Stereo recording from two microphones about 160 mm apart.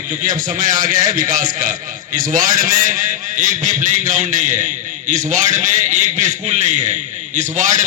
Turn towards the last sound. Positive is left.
turn(degrees=-50)  # may be behind; listen again after turning